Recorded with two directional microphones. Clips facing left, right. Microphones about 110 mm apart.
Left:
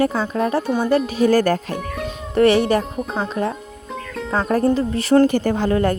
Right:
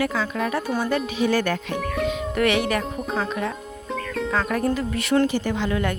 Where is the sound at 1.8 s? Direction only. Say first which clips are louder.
Right 2 dB; centre (ahead or behind).